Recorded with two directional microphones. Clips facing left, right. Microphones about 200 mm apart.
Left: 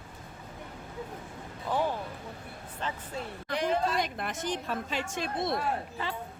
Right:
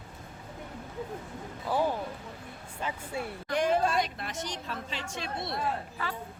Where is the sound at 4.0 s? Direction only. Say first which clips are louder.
Even; 50° left (ahead or behind).